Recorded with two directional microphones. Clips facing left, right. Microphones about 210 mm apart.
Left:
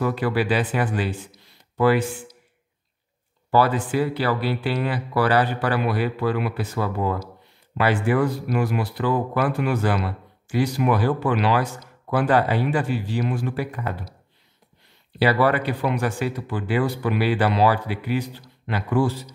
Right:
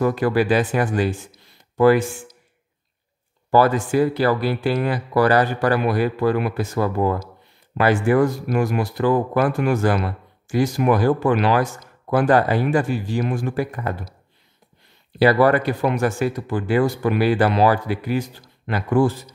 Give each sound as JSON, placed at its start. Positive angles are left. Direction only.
{"t": 0.0, "sound": "speech", "side_deg": -45}
{"t": 3.4, "sound": "speech", "side_deg": -45}
{"t": 15.1, "sound": "speech", "side_deg": -45}